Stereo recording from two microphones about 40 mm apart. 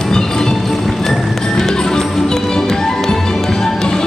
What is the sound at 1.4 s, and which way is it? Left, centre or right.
Music, centre.